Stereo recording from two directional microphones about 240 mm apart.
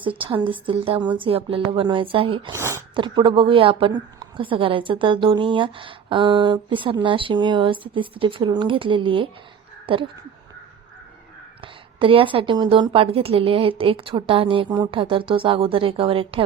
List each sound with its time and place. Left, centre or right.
0.2 s a woman's voice: right
9.8 s a sound: right
11.6 s a woman's voice: right